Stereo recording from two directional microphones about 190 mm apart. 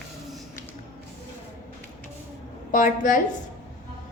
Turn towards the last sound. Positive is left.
turn(degrees=45)  # may be behind; listen again after turning